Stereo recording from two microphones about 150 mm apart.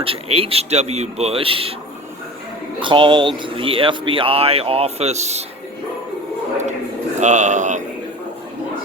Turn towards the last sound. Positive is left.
turn(degrees=-55)  # may be behind; listen again after turning